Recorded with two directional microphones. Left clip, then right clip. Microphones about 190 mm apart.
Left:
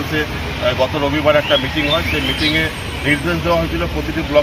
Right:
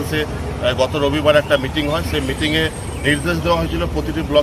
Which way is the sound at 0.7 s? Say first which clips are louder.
Even; 30° right (ahead or behind).